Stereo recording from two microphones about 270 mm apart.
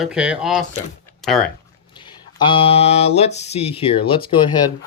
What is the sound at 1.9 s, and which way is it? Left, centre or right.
Speech, centre.